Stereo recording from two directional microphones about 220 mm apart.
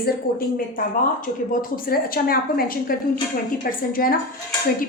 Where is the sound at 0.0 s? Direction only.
40° left (ahead or behind).